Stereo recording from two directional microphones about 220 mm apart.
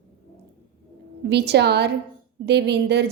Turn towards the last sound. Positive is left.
turn(degrees=-50)  # may be behind; listen again after turning